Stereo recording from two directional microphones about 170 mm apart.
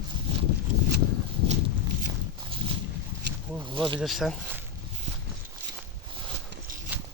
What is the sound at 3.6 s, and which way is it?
Speech, 30° right (ahead or behind).